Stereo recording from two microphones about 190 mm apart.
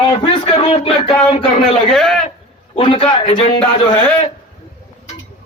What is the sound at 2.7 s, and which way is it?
Speech, 30° left (ahead or behind).